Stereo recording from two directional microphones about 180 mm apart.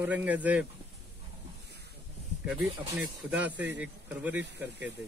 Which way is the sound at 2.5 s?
5° right (ahead or behind).